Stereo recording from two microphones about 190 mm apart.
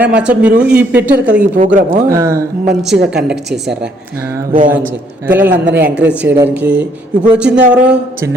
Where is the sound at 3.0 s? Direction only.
5° right (ahead or behind).